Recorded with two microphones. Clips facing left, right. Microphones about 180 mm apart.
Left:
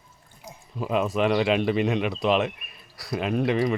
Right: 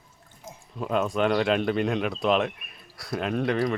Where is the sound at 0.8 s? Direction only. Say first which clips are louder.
Left 1 dB; 5° left (ahead or behind).